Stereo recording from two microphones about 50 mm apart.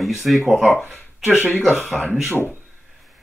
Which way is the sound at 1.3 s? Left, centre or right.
Left.